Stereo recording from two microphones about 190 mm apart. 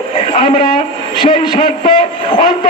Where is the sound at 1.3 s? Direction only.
25° left (ahead or behind).